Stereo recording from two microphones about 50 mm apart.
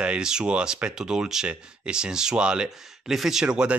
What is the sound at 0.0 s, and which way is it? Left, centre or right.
Speech, centre.